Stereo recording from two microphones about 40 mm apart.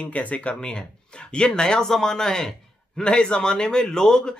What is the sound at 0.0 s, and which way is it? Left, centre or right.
Speech, left.